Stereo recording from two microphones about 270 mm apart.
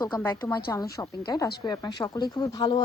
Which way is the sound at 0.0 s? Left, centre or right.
Centre.